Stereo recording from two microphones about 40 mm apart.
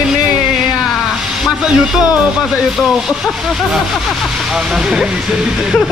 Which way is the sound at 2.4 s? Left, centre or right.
Centre.